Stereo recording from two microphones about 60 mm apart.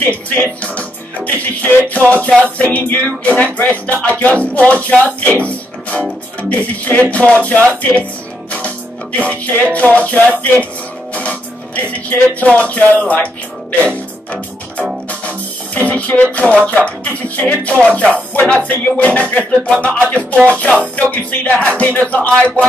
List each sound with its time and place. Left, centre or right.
0.1 s speech: left
8.5 s music: left
9.2 s speech: left
11.1 s music: left
16.6 s speech: left